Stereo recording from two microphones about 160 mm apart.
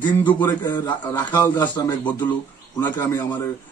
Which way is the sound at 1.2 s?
25° left (ahead or behind).